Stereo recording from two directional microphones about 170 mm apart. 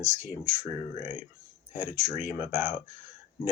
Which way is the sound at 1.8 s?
15° right (ahead or behind).